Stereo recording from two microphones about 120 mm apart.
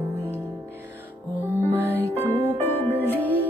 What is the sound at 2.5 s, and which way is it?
Music, 15° left (ahead or behind).